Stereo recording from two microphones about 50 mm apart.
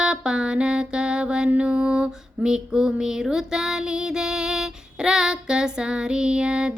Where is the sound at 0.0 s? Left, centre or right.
Centre.